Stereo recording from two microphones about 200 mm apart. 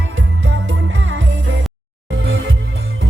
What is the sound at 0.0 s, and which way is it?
Music, 75° right (ahead or behind).